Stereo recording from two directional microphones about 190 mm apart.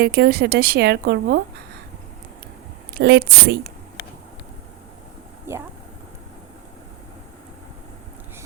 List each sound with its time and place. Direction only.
0.0 s speech: 60° right (ahead or behind)
2.9 s speech: 60° right (ahead or behind)